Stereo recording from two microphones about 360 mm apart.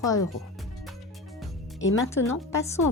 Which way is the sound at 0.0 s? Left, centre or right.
Centre.